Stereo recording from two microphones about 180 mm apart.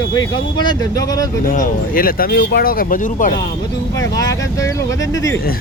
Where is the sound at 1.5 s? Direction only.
50° left (ahead or behind).